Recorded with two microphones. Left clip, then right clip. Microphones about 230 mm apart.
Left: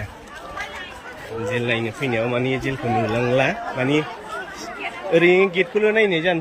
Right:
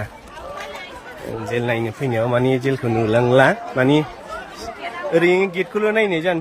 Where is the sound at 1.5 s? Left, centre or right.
Right.